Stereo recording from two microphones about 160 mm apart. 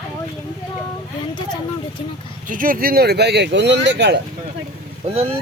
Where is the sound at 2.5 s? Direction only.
60° right (ahead or behind); by 4.2 s 90° right.